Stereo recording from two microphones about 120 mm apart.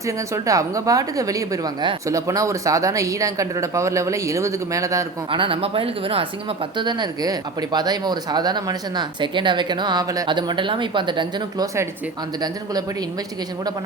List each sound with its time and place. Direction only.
0.3 s speech: 25° right (ahead or behind)
5.3 s speech: 45° right (ahead or behind)
6.7 s speech: 40° right (ahead or behind)
10.2 s speech: 40° right (ahead or behind)